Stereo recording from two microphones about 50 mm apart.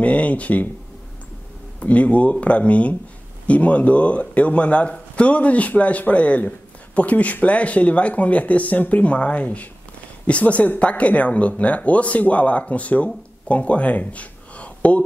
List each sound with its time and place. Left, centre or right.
0.0 s speech: left
1.8 s speech: left